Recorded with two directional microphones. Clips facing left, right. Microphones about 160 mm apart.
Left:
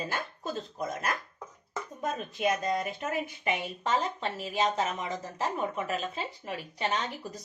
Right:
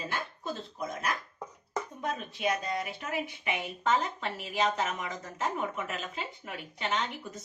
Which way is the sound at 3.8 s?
30° left (ahead or behind).